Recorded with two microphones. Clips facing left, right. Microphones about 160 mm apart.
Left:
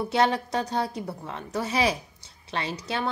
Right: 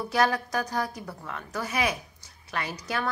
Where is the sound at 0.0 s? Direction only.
25° left (ahead or behind).